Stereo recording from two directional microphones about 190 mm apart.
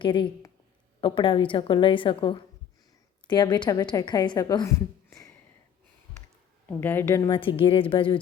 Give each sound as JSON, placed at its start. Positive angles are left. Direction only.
{"t": 0.0, "sound": "a woman's voice", "side_deg": 25}
{"t": 6.7, "sound": "speech", "side_deg": 10}
{"t": 7.3, "sound": "a woman's voice", "side_deg": 25}